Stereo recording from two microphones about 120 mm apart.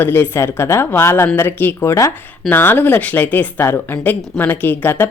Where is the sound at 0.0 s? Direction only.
20° left (ahead or behind).